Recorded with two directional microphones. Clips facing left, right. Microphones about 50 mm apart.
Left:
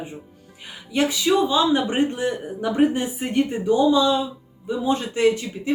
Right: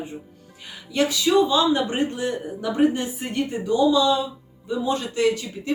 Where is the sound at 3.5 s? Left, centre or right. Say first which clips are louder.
Even; left.